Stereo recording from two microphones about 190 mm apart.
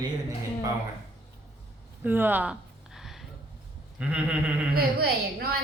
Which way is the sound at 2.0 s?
10° right (ahead or behind).